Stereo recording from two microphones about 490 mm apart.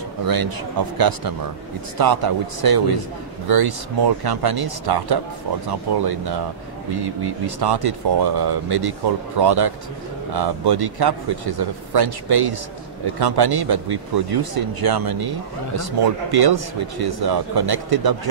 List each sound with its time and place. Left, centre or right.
0.2 s speech: right